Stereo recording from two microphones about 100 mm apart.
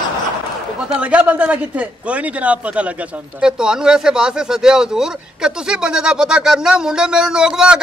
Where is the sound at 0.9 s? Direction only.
10° right (ahead or behind).